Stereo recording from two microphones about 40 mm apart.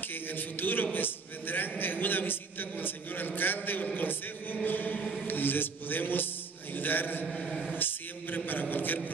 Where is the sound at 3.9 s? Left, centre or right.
Left.